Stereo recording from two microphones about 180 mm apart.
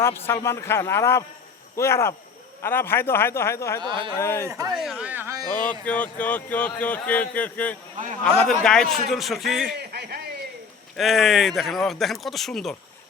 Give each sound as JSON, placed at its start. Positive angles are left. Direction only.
{"t": 0.0, "sound": "speech", "side_deg": 15}
{"t": 3.8, "sound": "speech", "side_deg": -25}
{"t": 4.1, "sound": "speech", "side_deg": 15}
{"t": 4.4, "sound": "speech", "side_deg": -15}
{"t": 4.7, "sound": "speech", "side_deg": 0}
{"t": 5.8, "sound": "speech", "side_deg": 10}
{"t": 9.7, "sound": "a sound", "side_deg": -65}
{"t": 10.9, "sound": "speech", "side_deg": 0}